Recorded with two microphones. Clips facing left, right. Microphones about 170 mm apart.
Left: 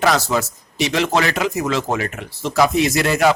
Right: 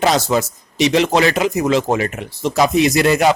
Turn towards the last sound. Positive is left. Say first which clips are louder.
# right 3 dB
turn(degrees=-20)  # may be behind; listen again after turning